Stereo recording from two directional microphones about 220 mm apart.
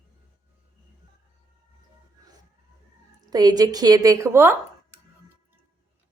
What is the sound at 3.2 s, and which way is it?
A woman's voice, 15° right (ahead or behind).